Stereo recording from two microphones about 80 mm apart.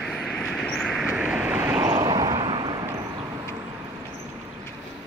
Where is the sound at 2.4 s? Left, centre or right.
Right.